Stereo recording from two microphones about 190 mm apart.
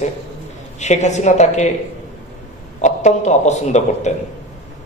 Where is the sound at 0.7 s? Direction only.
35° left (ahead or behind).